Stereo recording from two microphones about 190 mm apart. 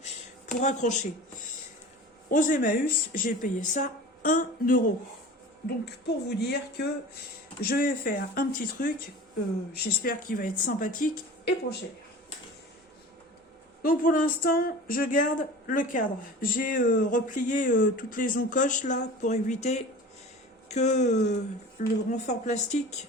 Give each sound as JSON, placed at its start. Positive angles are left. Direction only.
{"t": 0.6, "sound": "speech", "side_deg": 40}
{"t": 2.3, "sound": "speech", "side_deg": 45}
{"t": 5.8, "sound": "a woman's voice", "side_deg": 60}
{"t": 7.6, "sound": "speech", "side_deg": 50}
{"t": 13.8, "sound": "speech", "side_deg": 45}